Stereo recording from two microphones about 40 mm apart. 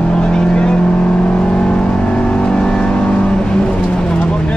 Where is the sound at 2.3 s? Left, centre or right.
Left.